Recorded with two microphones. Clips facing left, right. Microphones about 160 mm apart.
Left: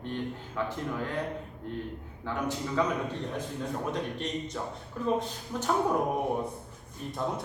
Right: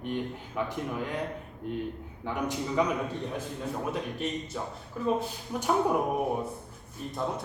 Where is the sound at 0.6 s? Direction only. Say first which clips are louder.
Right 1 dB; 15° right (ahead or behind).